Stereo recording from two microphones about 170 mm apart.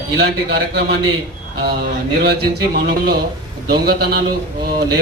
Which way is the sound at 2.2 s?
70° right (ahead or behind).